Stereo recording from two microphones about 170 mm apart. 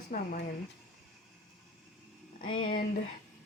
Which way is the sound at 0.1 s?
60° left (ahead or behind).